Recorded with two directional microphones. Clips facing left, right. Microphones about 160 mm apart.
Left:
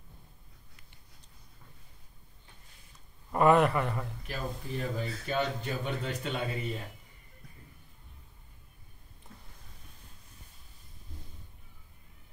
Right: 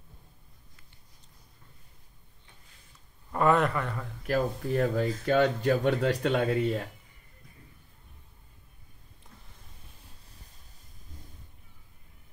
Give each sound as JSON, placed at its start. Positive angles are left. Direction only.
{"t": 3.3, "sound": "a man's voice", "side_deg": 15}
{"t": 4.3, "sound": "speech", "side_deg": -75}